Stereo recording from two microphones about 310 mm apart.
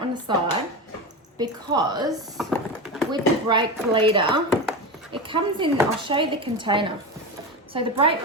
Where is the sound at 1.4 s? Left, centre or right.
Centre.